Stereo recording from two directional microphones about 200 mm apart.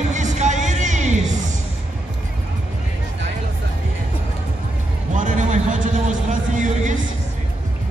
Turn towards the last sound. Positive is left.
turn(degrees=-40)  # may be behind; listen again after turning